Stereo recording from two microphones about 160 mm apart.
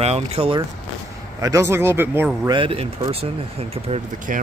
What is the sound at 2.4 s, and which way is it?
Speech, 30° right (ahead or behind).